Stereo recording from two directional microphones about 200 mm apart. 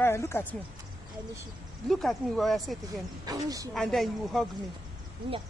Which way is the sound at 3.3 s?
20° right (ahead or behind).